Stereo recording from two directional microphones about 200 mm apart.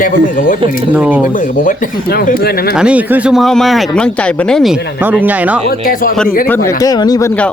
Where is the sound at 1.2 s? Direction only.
40° left (ahead or behind).